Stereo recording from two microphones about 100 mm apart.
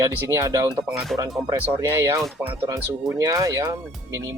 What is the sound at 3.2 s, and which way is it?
Speech, 35° right (ahead or behind).